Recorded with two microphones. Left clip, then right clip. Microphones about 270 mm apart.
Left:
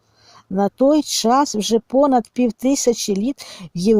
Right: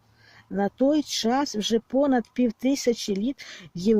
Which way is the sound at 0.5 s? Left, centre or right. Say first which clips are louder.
Left 7 dB; centre.